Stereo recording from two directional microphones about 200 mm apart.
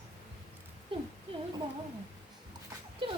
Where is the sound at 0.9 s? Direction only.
25° right (ahead or behind).